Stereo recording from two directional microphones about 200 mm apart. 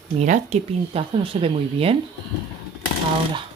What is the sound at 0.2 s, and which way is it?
Speech, 35° right (ahead or behind).